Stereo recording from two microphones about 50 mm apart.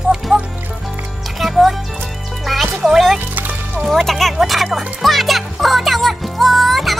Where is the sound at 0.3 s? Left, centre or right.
Right.